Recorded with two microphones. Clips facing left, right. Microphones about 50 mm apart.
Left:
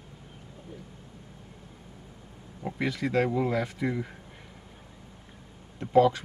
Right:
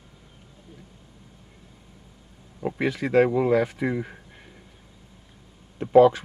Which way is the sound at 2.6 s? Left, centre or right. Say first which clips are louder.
Right 4 dB; centre.